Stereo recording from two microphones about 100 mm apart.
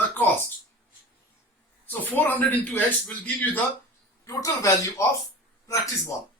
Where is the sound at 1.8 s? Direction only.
20° left (ahead or behind).